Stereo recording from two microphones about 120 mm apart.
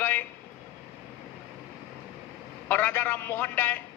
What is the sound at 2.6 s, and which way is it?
A man's voice, 15° left (ahead or behind).